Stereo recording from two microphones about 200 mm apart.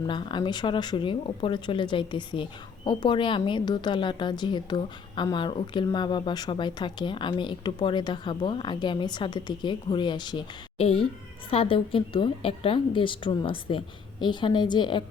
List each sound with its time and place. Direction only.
0.1 s speech: 25° left (ahead or behind)